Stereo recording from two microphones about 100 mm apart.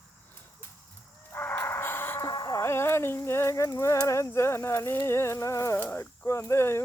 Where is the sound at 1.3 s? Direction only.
20° left (ahead or behind).